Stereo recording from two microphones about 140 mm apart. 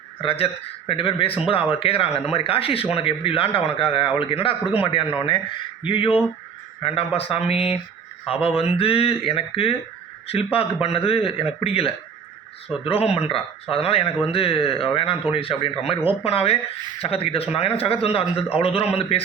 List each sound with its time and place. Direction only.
0.2 s speech: 45° left (ahead or behind)